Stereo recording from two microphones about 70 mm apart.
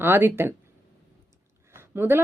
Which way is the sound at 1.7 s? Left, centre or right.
Right.